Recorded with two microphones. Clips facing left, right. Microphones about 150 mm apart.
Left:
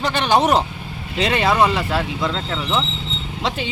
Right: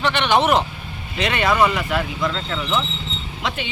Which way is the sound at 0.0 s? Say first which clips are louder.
Left 1 dB; 35° left (ahead or behind).